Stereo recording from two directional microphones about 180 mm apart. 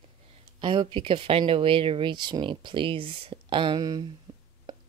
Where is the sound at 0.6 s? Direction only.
25° right (ahead or behind).